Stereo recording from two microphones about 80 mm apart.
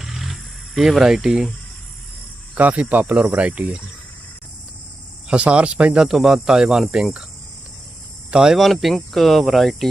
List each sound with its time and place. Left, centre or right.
0.0 s wild animals: centre
2.6 s speech: right
5.3 s speech: centre
8.3 s speech: centre